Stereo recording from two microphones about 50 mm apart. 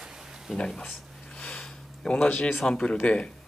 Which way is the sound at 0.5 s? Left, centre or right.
Centre.